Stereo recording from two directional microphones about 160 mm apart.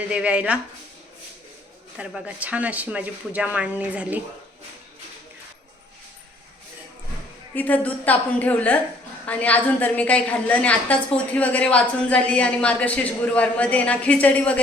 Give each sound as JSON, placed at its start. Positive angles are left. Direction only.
{"t": 0.1, "sound": "speech", "side_deg": -5}
{"t": 2.0, "sound": "speech", "side_deg": -10}
{"t": 7.5, "sound": "a woman's voice", "side_deg": 10}